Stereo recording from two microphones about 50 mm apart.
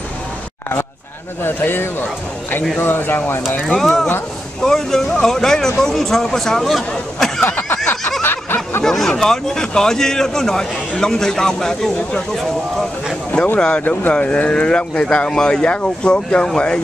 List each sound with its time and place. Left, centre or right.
1.4 s speech: left
3.6 s speech: centre
6.9 s chatter: centre
7.4 s a sound: left
8.2 s snicker: left
8.8 s speech: centre
13.7 s speech: left
14.1 s speech: left